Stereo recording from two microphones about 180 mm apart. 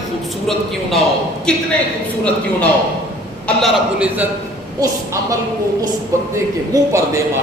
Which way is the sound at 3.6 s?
Centre (ahead or behind).